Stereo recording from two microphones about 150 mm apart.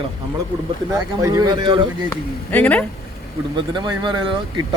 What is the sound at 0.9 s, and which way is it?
Speech, 25° right (ahead or behind).